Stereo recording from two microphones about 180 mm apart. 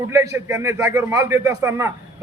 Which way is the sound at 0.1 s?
15° right (ahead or behind).